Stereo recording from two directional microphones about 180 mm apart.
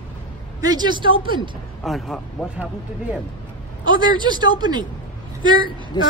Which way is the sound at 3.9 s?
25° right (ahead or behind).